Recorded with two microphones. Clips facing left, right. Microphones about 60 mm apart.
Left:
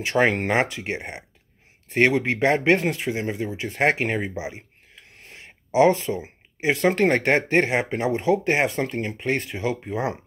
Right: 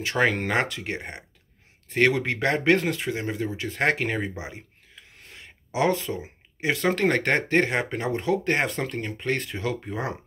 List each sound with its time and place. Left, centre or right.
0.0 s speech: left